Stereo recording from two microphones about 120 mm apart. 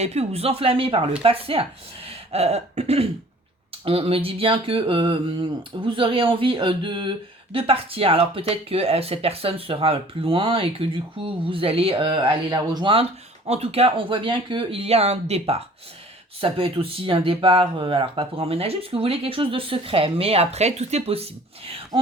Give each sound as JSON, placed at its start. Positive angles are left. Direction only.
{"t": 0.0, "sound": "speech", "side_deg": -65}
{"t": 2.0, "sound": "throat clearing", "side_deg": -60}
{"t": 3.8, "sound": "speech", "side_deg": -50}
{"t": 13.5, "sound": "speech", "side_deg": -55}